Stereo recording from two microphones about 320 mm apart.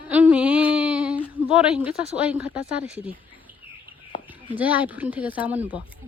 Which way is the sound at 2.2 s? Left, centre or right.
Centre.